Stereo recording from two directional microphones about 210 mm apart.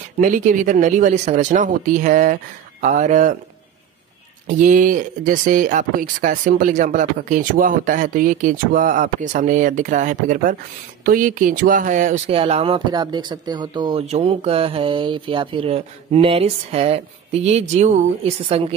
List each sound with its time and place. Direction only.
0.2 s speech: 40° right (ahead or behind)
4.5 s speech: 40° right (ahead or behind)